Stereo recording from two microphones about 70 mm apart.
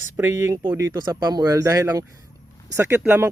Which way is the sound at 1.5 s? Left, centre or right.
Right.